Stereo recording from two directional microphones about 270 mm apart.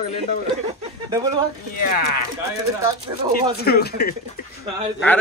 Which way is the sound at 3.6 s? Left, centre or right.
Left.